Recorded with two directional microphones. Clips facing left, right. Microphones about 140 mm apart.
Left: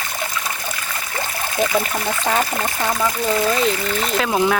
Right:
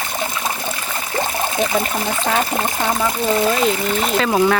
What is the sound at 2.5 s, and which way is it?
Speech, 25° right (ahead or behind).